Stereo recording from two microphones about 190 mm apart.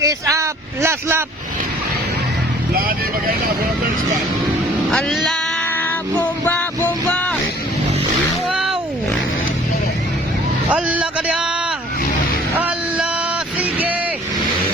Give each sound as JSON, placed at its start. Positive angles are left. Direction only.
{"t": 0.0, "sound": "speech", "side_deg": -15}
{"t": 4.9, "sound": "cat", "side_deg": 5}
{"t": 6.1, "sound": "a sound", "side_deg": 10}
{"t": 8.4, "sound": "vehicle", "side_deg": 0}
{"t": 10.7, "sound": "a sound", "side_deg": -5}
{"t": 12.5, "sound": "music", "side_deg": -5}
{"t": 13.6, "sound": "vehicle", "side_deg": -10}